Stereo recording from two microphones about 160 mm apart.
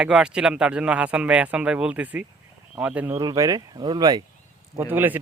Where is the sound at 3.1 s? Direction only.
25° right (ahead or behind).